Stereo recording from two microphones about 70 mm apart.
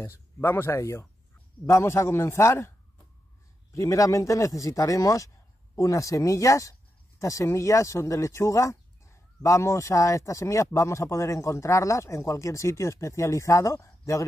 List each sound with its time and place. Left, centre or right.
0.0 s speech: left
3.7 s speech: left